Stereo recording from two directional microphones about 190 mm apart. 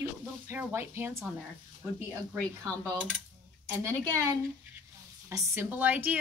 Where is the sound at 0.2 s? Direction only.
10° right (ahead or behind).